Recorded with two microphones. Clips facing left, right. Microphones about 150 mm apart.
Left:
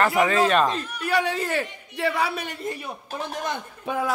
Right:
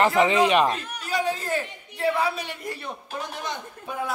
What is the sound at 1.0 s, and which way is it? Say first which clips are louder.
A man's voice: left 3 dB; 65° left (ahead or behind).